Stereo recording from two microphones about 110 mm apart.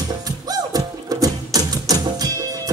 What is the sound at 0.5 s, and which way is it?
Music, 35° right (ahead or behind).